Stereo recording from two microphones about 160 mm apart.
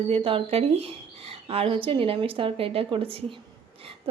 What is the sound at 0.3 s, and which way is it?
Speech, 35° right (ahead or behind).